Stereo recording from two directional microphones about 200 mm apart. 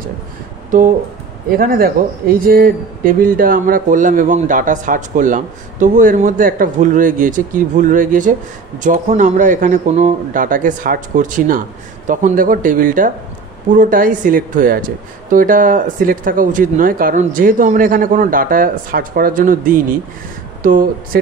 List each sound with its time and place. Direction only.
0.7 s a man's voice: 40° right (ahead or behind)